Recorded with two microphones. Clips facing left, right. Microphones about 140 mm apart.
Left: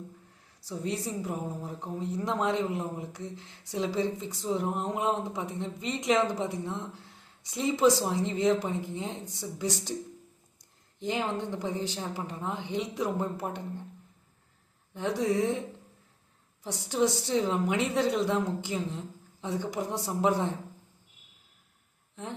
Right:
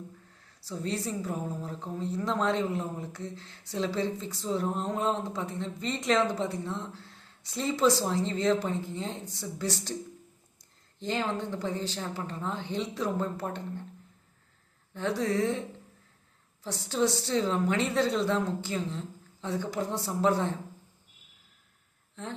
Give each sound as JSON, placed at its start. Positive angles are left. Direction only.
{"t": 0.6, "sound": "a woman's voice", "side_deg": 15}
{"t": 11.0, "sound": "a woman's voice", "side_deg": 15}
{"t": 14.9, "sound": "a woman's voice", "side_deg": 15}
{"t": 16.6, "sound": "a woman's voice", "side_deg": 15}
{"t": 22.1, "sound": "speech", "side_deg": 15}